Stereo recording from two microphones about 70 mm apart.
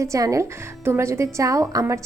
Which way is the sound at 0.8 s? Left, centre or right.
Right.